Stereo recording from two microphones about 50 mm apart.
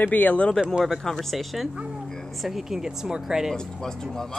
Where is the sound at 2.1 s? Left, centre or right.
Centre.